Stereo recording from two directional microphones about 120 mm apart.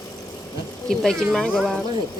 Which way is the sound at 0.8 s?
5° left (ahead or behind).